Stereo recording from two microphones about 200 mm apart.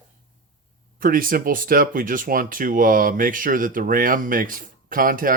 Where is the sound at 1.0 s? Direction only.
45° right (ahead or behind).